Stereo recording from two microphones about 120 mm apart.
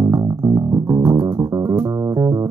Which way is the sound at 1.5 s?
20° right (ahead or behind).